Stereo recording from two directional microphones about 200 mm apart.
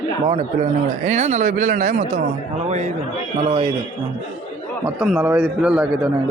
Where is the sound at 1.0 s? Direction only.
35° right (ahead or behind).